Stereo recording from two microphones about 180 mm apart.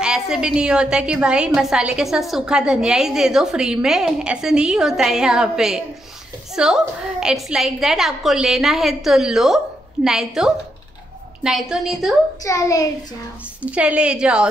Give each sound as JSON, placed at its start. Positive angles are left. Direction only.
{"t": 0.0, "sound": "a woman's voice", "side_deg": -5}
{"t": 12.4, "sound": "a child's voice", "side_deg": 15}
{"t": 13.6, "sound": "a woman's voice", "side_deg": -5}